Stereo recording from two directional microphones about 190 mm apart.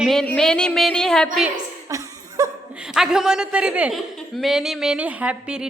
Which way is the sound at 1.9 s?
15° right (ahead or behind).